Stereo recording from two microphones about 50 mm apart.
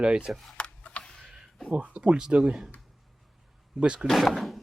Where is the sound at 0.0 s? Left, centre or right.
Right.